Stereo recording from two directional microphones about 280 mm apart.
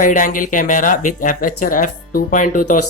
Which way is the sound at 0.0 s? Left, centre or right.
Left.